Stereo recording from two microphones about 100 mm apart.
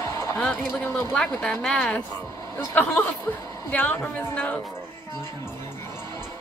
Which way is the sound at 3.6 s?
15° left (ahead or behind).